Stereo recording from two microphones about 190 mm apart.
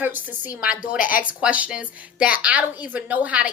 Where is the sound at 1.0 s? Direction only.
45° left (ahead or behind).